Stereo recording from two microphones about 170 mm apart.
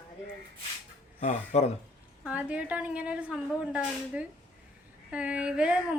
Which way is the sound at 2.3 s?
10° right (ahead or behind).